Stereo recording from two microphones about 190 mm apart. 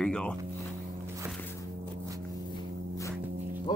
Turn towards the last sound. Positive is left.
turn(degrees=25)  # may be behind; listen again after turning